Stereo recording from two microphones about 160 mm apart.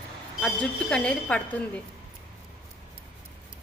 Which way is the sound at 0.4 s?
5° left (ahead or behind).